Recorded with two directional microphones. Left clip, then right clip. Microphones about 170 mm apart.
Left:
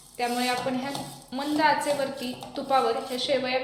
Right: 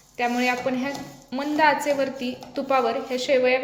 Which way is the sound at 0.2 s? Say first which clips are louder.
Right 3 dB; 45° right (ahead or behind).